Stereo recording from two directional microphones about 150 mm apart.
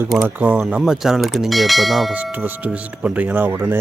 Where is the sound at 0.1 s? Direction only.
5° right (ahead or behind).